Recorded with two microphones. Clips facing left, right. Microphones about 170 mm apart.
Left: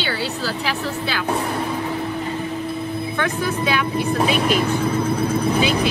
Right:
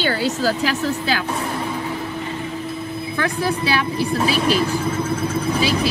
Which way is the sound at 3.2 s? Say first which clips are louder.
Right 2 dB; 35° right (ahead or behind).